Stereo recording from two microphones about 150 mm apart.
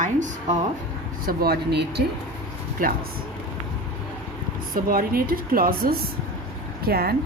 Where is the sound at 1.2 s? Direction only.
80° right.